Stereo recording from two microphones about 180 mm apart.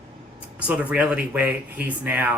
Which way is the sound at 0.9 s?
10° right (ahead or behind).